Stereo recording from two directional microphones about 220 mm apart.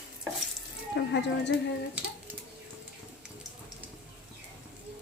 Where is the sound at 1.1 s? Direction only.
50° left (ahead or behind).